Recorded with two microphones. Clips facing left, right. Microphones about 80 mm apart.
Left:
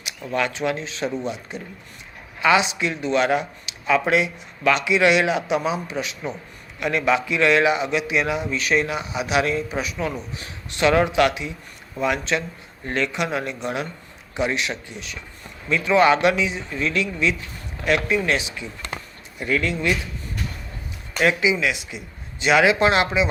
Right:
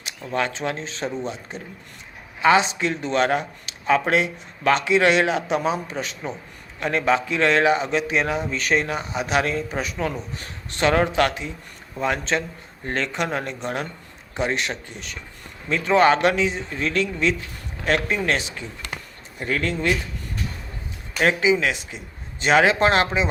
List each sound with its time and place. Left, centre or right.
0.0 s speech: right
21.2 s speech: right